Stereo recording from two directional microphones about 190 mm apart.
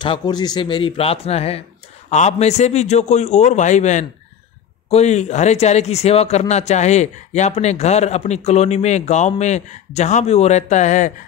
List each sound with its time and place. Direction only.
0.0 s a man's voice: 25° left (ahead or behind); by 11.1 s 40° left (ahead or behind)